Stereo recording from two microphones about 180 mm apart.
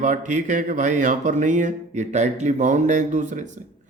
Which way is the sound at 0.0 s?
45° right (ahead or behind).